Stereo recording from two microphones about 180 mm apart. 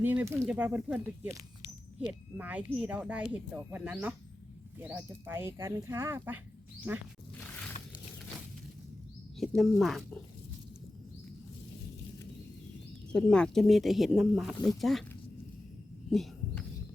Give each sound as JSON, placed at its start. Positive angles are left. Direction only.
{"t": 0.0, "sound": "speech", "side_deg": -10}
{"t": 9.4, "sound": "speech", "side_deg": 0}
{"t": 13.1, "sound": "speech", "side_deg": 5}
{"t": 16.0, "sound": "a sound", "side_deg": 0}